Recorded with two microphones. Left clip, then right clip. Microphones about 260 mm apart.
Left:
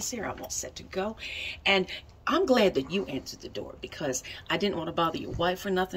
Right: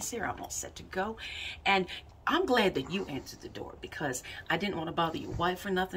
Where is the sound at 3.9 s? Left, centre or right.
Centre.